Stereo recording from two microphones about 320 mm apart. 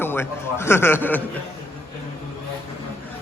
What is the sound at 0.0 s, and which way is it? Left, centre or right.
A man's voice, centre.